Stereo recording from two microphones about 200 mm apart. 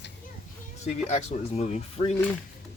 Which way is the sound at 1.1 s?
35° left (ahead or behind).